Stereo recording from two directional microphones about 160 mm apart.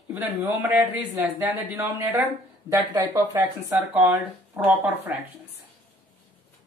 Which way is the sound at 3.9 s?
10° right (ahead or behind).